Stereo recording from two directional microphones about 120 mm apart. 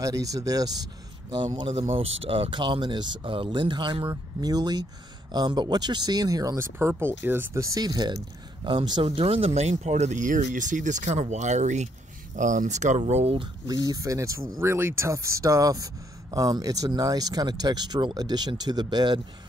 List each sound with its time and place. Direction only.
0.0 s speech: 30° right (ahead or behind)
1.7 s speech: 55° right (ahead or behind); by 11.9 s 80° right
12.4 s speech: 90° right
13.0 s speech: 55° right (ahead or behind)
13.7 s speech: 30° right (ahead or behind)